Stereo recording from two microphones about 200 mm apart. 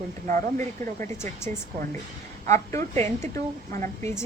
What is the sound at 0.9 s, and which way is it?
Speech, 15° left (ahead or behind).